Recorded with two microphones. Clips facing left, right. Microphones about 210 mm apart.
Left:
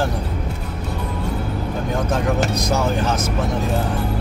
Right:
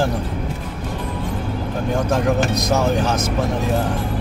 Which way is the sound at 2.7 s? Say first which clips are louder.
Right 3 dB; 15° right (ahead or behind).